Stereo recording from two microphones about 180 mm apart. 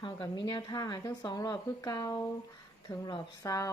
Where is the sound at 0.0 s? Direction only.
25° left (ahead or behind).